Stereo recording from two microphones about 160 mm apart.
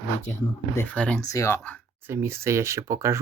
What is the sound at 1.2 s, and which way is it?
Speech, 20° left (ahead or behind).